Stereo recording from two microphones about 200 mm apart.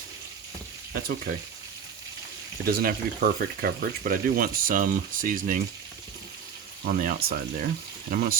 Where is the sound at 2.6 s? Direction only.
50° right (ahead or behind).